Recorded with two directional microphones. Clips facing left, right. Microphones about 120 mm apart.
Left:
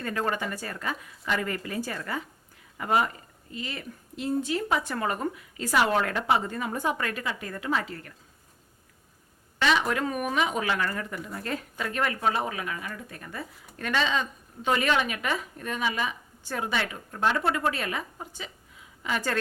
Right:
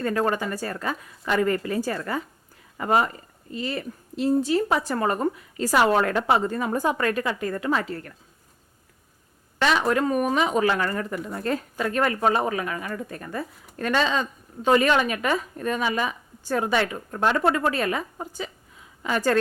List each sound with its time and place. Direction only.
0.0 s speech: 40° right (ahead or behind)
9.6 s speech: 40° right (ahead or behind)